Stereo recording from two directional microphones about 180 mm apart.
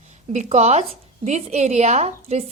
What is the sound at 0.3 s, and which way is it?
A woman's voice, 40° right (ahead or behind).